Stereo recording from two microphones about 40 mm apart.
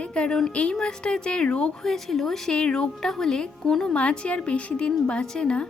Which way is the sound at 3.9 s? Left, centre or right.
Left.